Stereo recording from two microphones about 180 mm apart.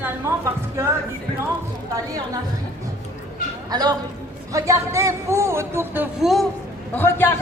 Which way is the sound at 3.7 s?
20° right (ahead or behind).